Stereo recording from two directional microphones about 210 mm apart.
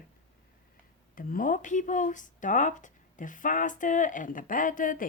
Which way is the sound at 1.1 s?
40° left (ahead or behind).